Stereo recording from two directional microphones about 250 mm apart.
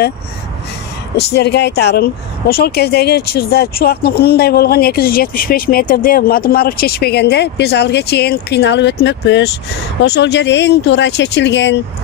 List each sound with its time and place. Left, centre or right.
1.1 s speech: left